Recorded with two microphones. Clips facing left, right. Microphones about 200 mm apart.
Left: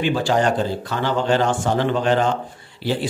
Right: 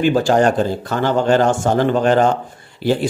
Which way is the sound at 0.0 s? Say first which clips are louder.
Right 5 dB; 45° right (ahead or behind).